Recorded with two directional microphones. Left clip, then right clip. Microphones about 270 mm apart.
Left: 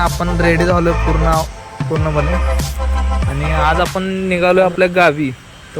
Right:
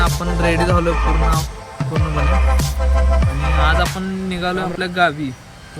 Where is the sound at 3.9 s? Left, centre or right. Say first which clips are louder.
Left 8 dB; centre.